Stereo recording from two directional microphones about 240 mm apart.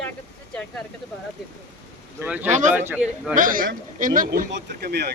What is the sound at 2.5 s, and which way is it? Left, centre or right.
Speech, right.